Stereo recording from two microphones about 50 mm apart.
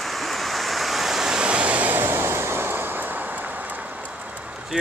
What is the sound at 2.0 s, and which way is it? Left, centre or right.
Vehicle, right.